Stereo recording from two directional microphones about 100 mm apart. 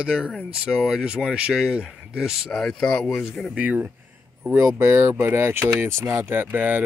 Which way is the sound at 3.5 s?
15° right (ahead or behind).